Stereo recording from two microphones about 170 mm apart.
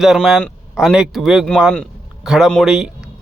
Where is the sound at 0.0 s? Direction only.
5° right (ahead or behind).